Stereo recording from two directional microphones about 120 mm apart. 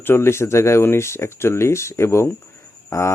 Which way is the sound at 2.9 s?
25° left (ahead or behind).